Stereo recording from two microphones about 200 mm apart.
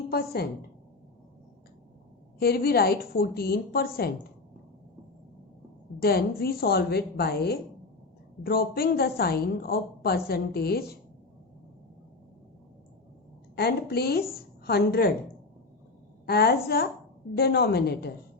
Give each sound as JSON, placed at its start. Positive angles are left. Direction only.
{"t": 0.1, "sound": "a woman's voice", "side_deg": 50}
{"t": 2.4, "sound": "a woman's voice", "side_deg": 50}
{"t": 6.0, "sound": "a woman's voice", "side_deg": 50}
{"t": 13.6, "sound": "a woman's voice", "side_deg": 50}
{"t": 16.2, "sound": "a woman's voice", "side_deg": 50}